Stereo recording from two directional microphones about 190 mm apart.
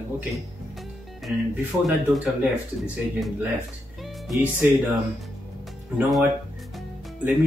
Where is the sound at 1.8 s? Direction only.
Centre (ahead or behind).